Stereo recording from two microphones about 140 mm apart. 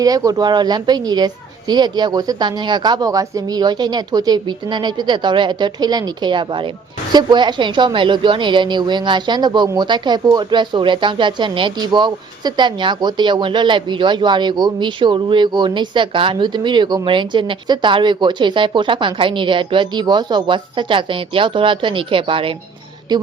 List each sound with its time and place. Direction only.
0.0 s speech: 25° right (ahead or behind)